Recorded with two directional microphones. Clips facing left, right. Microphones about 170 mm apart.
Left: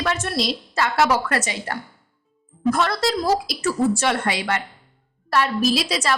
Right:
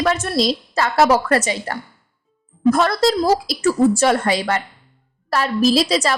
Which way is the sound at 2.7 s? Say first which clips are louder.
Right 5 dB; 45° right (ahead or behind).